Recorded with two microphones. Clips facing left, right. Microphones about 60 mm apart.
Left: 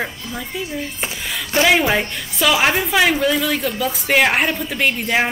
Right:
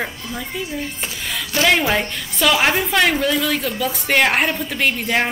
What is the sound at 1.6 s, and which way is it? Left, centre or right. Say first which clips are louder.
A woman's voice: left 1 dB; centre.